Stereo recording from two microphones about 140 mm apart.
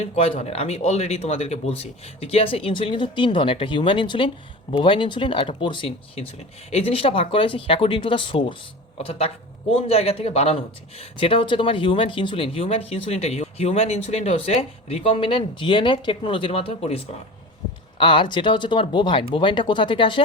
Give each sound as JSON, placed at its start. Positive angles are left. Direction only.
{"t": 0.0, "sound": "speech", "side_deg": 50}